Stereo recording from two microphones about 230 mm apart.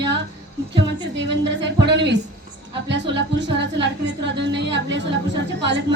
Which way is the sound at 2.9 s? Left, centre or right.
Right.